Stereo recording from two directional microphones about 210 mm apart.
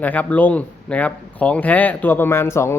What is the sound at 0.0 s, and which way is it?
Speech, 5° left (ahead or behind).